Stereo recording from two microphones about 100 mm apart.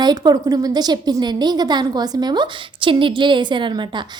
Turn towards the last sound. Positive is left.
turn(degrees=-50)  # may be behind; listen again after turning